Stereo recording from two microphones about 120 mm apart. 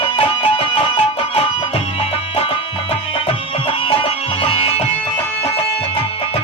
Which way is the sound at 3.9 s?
50° left (ahead or behind).